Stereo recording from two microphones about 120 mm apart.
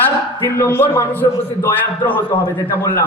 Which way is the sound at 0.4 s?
20° left (ahead or behind).